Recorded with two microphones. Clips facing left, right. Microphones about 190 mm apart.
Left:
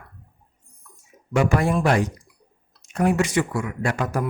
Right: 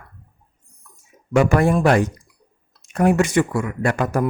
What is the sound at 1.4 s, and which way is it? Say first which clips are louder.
Speech: right 4 dB; 55° right (ahead or behind).